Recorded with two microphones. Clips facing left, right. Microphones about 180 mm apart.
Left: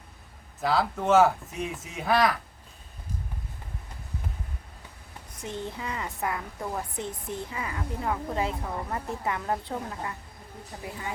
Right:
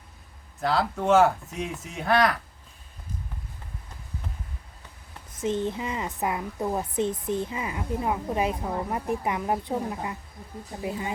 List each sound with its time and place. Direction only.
0.6 s speech: centre (ahead or behind)
5.4 s a woman's voice: 20° right (ahead or behind)